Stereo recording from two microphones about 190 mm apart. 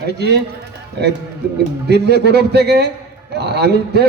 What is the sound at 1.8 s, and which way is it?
A man's voice, 60° right (ahead or behind).